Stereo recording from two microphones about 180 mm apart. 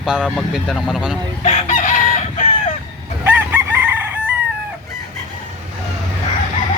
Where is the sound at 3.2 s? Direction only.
10° right (ahead or behind).